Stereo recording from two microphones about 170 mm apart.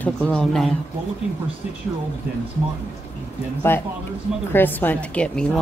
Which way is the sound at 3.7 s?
10° left (ahead or behind).